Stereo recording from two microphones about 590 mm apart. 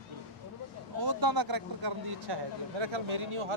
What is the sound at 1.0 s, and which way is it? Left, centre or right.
Speech, right.